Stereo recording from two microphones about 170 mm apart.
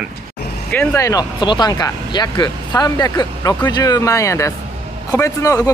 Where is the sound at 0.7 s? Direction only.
15° left (ahead or behind).